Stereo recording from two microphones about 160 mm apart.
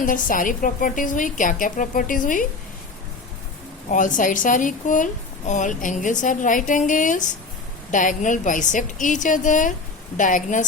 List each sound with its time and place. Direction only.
0.0 s a woman's voice: 55° left (ahead or behind)
3.9 s a woman's voice: 55° left (ahead or behind)